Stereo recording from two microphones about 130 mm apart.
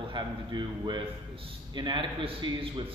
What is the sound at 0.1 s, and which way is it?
A man's voice, 35° right (ahead or behind).